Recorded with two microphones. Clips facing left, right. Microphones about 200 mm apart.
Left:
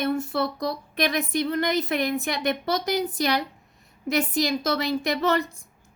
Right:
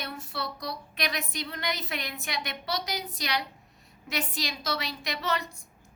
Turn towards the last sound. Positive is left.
turn(degrees=50)  # may be behind; listen again after turning